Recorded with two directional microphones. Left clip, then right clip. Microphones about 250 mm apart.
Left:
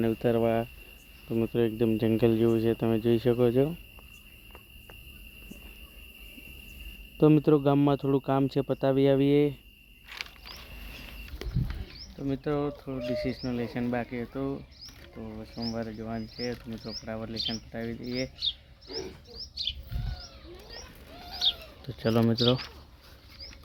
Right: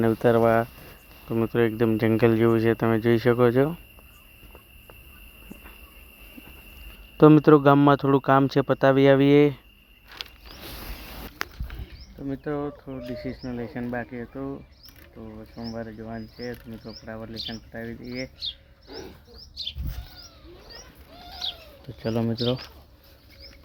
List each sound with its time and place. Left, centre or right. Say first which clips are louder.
0.0 s speech: right 6 dB; centre
7.2 s speech: right 7 dB; centre
12.2 s speech: even; centre
18.3 s roaring cats: left 2 dB; right
21.8 s speech: left 1 dB; centre